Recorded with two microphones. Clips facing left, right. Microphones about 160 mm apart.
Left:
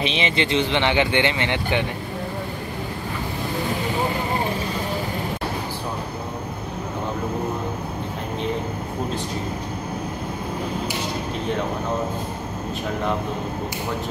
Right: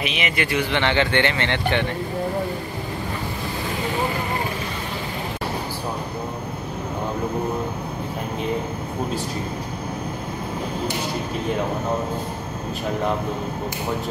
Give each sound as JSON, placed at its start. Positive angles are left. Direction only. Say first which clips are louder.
{"t": 0.0, "sound": "a man's voice", "louder": "left 2 dB", "side_deg": 30}